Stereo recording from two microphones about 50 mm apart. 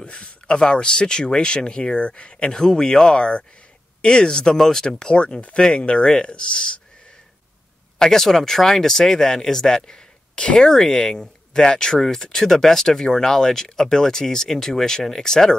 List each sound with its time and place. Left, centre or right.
0.0 s speech: left
8.0 s speech: centre